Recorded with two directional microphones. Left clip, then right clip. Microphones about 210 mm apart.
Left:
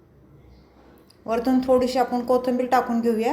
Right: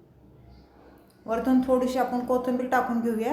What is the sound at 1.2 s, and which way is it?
Speech, 10° left (ahead or behind).